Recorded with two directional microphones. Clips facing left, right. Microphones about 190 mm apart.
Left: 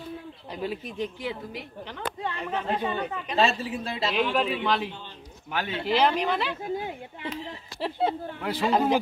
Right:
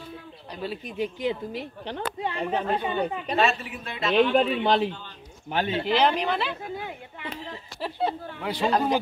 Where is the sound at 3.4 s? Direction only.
30° left (ahead or behind).